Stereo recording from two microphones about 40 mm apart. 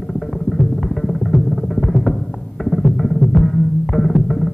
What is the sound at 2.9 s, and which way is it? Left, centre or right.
Music, centre.